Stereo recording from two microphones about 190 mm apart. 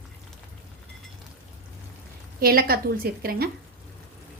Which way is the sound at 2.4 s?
50° right (ahead or behind).